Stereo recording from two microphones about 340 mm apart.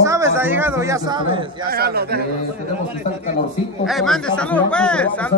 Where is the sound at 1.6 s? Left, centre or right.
Right.